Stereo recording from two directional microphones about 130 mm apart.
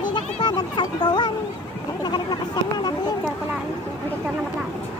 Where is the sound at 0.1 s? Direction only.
35° left (ahead or behind).